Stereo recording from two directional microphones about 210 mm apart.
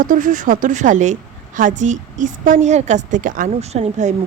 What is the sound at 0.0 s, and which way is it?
Speech, 40° right (ahead or behind).